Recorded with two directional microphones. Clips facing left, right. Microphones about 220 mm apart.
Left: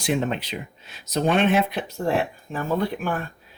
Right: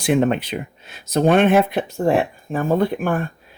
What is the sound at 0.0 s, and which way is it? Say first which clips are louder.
Speech: right 7 dB; 55° right (ahead or behind).